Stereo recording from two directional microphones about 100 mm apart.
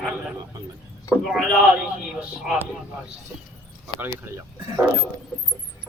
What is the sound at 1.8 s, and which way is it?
Speech, 15° right (ahead or behind).